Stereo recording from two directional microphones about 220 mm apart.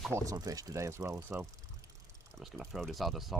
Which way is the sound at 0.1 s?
15° right (ahead or behind).